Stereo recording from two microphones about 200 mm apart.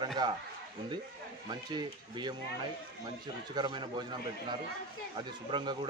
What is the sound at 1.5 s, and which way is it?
Speech, 20° right (ahead or behind).